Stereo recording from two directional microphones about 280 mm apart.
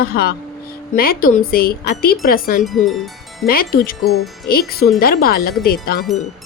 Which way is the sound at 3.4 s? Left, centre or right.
Left.